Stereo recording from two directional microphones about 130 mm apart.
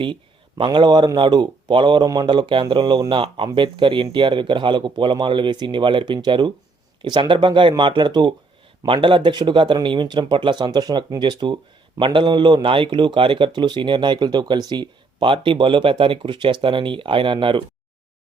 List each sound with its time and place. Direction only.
0.0 s speech: 40° right (ahead or behind)